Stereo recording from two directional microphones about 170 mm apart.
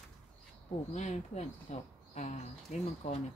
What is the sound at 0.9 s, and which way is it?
Speech, 40° left (ahead or behind).